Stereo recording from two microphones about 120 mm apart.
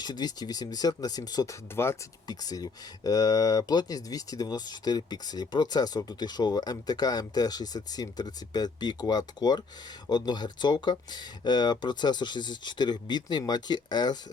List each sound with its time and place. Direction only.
0.0 s speech: 35° left (ahead or behind)
1.7 s speech: 20° left (ahead or behind)
2.2 s speech: 30° left (ahead or behind)